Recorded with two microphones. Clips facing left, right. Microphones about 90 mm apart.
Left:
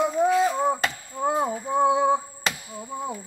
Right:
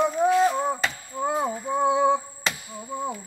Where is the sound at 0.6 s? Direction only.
10° left (ahead or behind).